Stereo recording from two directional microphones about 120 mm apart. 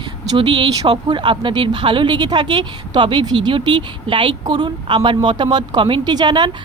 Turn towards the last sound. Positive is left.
turn(degrees=-40)  # may be behind; listen again after turning